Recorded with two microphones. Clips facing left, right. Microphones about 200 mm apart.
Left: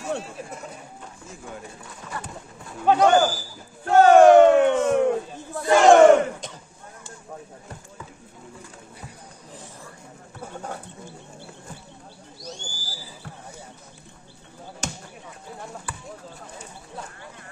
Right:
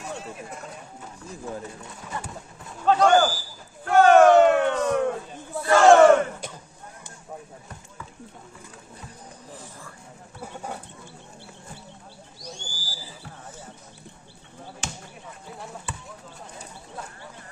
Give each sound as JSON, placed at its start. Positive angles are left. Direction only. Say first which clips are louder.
{"t": 2.8, "sound": "speech", "louder": "left 1 dB", "side_deg": 15}
{"t": 3.8, "sound": "a sound", "louder": "left 2 dB", "side_deg": 25}
{"t": 5.6, "sound": "battle cry", "louder": "left 1 dB", "side_deg": 20}
{"t": 12.4, "sound": "owl", "louder": "left 3 dB", "side_deg": -10}
{"t": 15.9, "sound": "basketball bounce", "louder": "even", "side_deg": -25}